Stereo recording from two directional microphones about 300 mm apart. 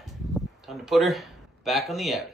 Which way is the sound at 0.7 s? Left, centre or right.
Centre.